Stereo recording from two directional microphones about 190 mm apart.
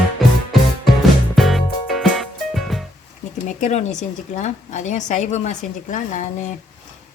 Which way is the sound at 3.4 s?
40° left (ahead or behind).